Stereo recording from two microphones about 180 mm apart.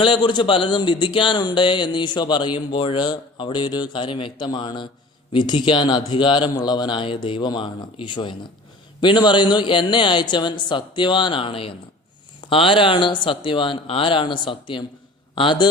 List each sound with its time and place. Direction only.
0.0 s speech: 25° left (ahead or behind)